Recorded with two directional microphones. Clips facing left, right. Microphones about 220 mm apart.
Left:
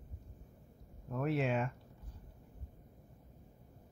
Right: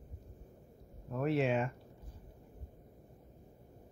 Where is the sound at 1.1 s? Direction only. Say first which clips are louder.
Right 2 dB; centre (ahead or behind).